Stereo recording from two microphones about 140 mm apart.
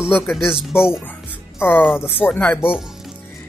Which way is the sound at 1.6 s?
15° left (ahead or behind).